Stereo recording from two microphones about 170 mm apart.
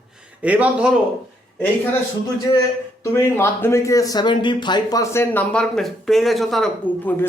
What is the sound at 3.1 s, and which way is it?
Speech, 15° left (ahead or behind).